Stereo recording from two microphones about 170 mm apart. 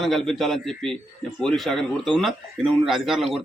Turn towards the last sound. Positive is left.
turn(degrees=0)  # may be behind; listen again after turning